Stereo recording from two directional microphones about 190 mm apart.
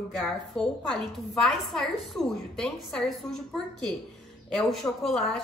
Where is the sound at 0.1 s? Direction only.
Centre (ahead or behind).